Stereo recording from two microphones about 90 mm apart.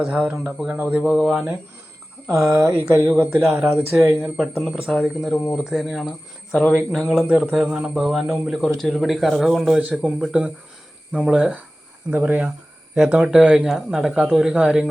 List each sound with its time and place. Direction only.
0.0 s speech: 15° right (ahead or behind)
2.9 s speech: 25° right (ahead or behind)
4.4 s speech: centre (ahead or behind)
5.3 s speech: 5° left (ahead or behind)
12.1 s speech: 20° right (ahead or behind)